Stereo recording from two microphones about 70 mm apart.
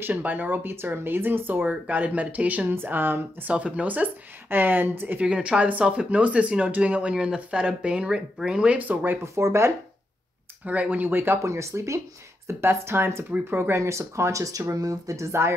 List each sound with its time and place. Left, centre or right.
0.0 s speech: right
5.2 s speech: centre
9.2 s speech: right
10.6 s speech: right
11.4 s speech: right